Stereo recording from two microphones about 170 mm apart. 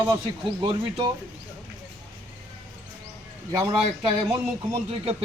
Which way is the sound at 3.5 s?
20° right (ahead or behind).